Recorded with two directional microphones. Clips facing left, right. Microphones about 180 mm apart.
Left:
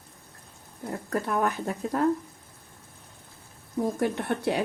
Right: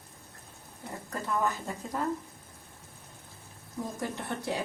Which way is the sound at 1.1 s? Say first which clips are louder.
Left 4 dB; 70° left (ahead or behind).